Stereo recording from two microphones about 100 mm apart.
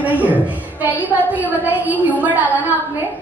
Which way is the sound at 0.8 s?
15° right (ahead or behind).